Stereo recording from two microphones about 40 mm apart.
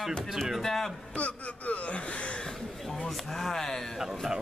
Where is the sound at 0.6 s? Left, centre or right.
Centre.